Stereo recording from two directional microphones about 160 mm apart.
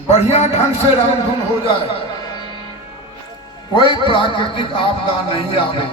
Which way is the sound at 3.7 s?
30° left (ahead or behind).